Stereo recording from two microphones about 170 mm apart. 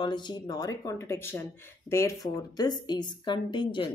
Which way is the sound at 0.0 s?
25° left (ahead or behind).